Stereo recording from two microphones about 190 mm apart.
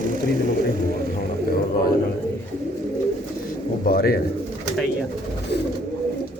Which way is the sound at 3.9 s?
55° left (ahead or behind).